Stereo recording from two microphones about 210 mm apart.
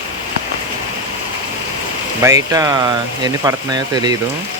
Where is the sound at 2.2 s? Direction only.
15° right (ahead or behind).